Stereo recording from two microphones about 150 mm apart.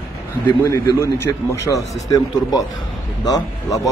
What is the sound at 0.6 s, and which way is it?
A man's voice, 20° left (ahead or behind).